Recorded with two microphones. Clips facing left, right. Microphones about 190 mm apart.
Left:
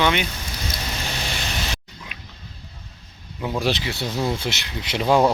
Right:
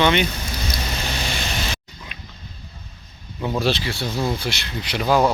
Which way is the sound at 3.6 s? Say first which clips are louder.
Right 1 dB; 15° left (ahead or behind).